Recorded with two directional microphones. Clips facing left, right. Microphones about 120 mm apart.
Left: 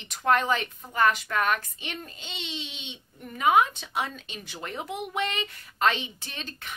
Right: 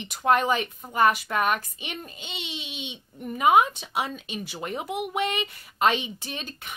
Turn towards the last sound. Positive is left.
turn(degrees=-15)  # may be behind; listen again after turning